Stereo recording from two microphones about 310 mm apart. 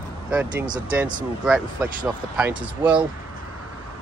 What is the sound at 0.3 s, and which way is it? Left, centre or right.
Speech, centre.